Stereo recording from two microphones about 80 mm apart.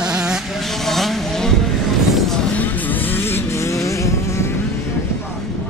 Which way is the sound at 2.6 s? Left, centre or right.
Left.